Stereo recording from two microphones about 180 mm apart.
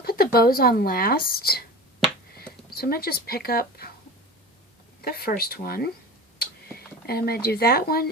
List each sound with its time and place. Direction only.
0.0 s speech: 55° left (ahead or behind)
2.7 s speech: 60° left (ahead or behind)
5.0 s speech: 55° left (ahead or behind)
6.4 s a sound: 60° left (ahead or behind)